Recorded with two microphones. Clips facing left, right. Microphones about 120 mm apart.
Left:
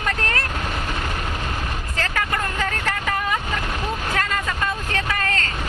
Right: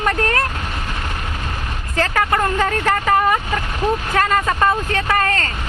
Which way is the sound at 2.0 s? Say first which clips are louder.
Right 8 dB; 45° right (ahead or behind).